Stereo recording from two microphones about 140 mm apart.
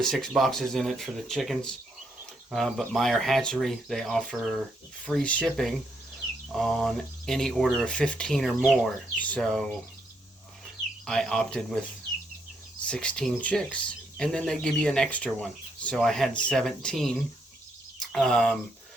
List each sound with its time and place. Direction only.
0.0 s speech: centre (ahead or behind)
11.0 s speech: 5° left (ahead or behind)
12.9 s speech: 5° left (ahead or behind)